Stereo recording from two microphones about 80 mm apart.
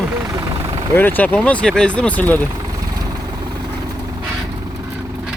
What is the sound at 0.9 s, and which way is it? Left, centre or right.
Speech, left.